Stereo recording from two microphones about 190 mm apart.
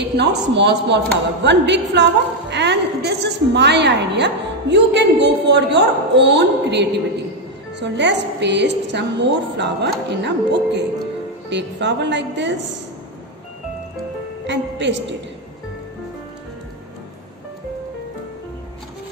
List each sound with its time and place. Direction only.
0.2 s a woman's voice: 65° right (ahead or behind)
14.4 s a woman's voice: 70° right (ahead or behind)